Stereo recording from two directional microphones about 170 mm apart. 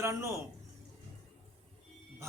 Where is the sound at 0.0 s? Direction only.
15° right (ahead or behind).